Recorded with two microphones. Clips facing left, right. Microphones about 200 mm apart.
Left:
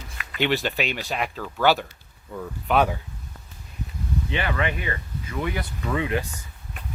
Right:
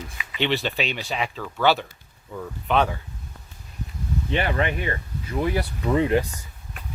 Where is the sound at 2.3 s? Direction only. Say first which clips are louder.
Even; centre (ahead or behind).